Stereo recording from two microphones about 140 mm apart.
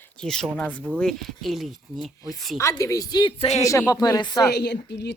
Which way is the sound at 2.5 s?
20° left (ahead or behind).